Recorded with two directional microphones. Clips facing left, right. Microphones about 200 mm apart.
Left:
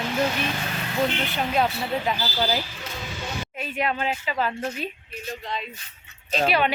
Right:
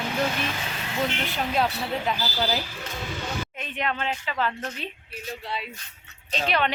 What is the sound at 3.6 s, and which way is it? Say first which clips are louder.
Speech: left 5 dB; 10° left (ahead or behind).